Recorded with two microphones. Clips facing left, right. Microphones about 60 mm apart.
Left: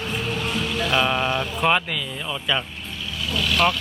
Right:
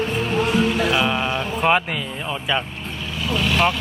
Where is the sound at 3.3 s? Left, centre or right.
Right.